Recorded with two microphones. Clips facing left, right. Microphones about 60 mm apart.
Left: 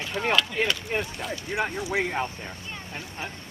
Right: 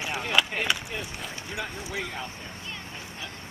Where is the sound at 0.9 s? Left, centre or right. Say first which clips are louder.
Left 6 dB; left.